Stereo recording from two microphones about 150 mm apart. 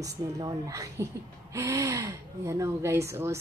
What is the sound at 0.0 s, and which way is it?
Speech, 20° right (ahead or behind).